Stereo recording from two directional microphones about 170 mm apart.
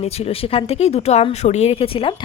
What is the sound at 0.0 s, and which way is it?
A woman's voice, 35° left (ahead or behind).